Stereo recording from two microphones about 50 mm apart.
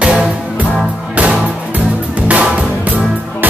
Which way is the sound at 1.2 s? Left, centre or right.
Right.